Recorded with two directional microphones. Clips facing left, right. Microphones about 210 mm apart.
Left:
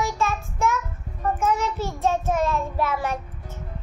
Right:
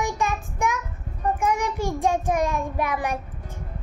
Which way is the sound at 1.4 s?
15° right (ahead or behind).